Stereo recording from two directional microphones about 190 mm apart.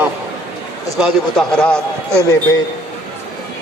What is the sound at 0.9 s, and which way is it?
A man's voice, centre (ahead or behind).